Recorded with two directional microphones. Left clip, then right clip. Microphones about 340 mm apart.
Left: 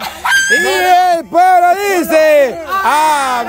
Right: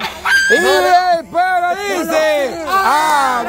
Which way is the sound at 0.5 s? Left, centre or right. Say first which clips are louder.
Left 1 dB; centre.